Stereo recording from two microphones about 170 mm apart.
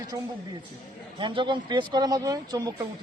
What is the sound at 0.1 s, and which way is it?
Speech, 20° right (ahead or behind).